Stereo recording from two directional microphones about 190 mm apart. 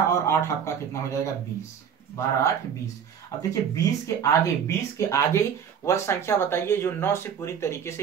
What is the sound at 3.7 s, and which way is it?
Speech, 15° left (ahead or behind).